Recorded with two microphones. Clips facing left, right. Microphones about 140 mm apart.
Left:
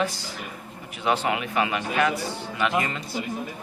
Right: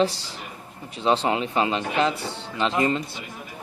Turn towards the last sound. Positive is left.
turn(degrees=-25)  # may be behind; listen again after turning